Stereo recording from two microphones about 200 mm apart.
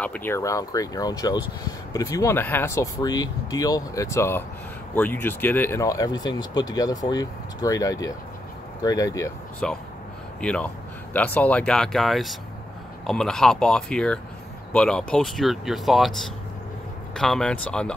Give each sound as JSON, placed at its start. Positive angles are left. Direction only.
{"t": 0.0, "sound": "speech", "side_deg": 10}
{"t": 9.6, "sound": "speech", "side_deg": 5}